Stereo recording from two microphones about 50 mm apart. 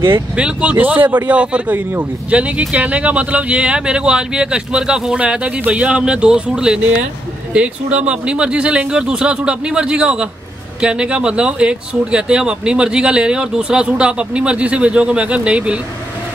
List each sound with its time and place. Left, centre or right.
0.4 s speech: right
0.7 s a man's voice: right